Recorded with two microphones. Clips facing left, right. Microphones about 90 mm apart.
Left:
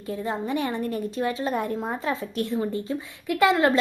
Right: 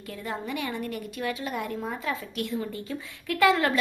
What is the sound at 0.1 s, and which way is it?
A woman's voice, 25° left (ahead or behind).